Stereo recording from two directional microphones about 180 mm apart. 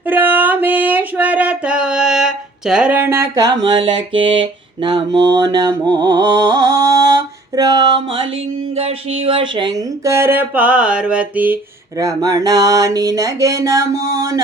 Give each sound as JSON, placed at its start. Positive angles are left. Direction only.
{"t": 0.1, "sound": "music", "side_deg": -10}
{"t": 8.7, "sound": "speech", "side_deg": -35}
{"t": 11.9, "sound": "a sound", "side_deg": -20}